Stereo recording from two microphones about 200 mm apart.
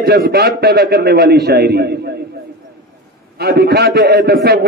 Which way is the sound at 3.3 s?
55° right (ahead or behind).